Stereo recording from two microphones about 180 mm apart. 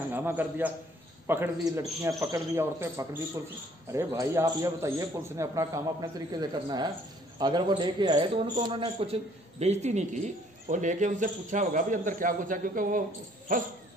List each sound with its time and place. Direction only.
0.1 s a man's voice: 10° right (ahead or behind); by 13.0 s 50° right (ahead or behind)